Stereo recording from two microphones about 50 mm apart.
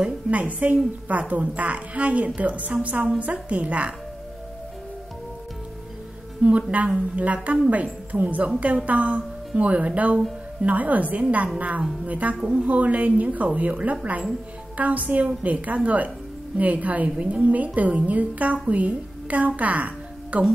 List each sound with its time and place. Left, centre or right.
0.0 s a woman's voice: right
6.4 s a woman's voice: right